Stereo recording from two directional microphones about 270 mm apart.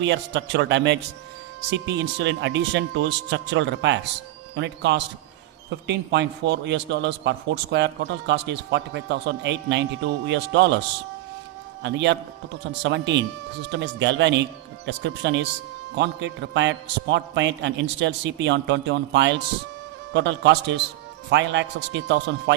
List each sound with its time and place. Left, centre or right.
0.0 s a man's voice: right
11.8 s a man's voice: right